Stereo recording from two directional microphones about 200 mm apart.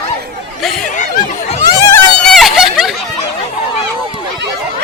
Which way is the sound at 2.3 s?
Centre (ahead or behind).